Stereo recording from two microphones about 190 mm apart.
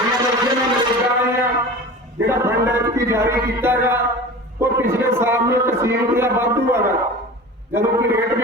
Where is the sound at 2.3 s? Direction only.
15° right (ahead or behind).